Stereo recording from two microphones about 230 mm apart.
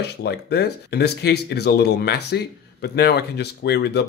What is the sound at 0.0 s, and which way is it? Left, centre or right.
Speech, left.